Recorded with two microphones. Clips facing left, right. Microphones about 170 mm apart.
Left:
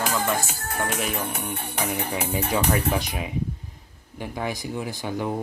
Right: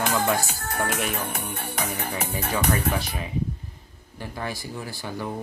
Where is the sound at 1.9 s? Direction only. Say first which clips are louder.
Left 3 dB; 10° left (ahead or behind).